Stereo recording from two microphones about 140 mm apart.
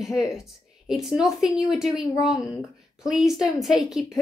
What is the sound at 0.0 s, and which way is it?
A woman's voice, centre (ahead or behind).